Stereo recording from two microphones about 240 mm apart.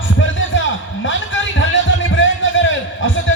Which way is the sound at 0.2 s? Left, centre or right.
Left.